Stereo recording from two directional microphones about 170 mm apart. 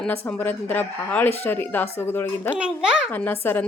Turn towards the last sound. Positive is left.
turn(degrees=10)  # may be behind; listen again after turning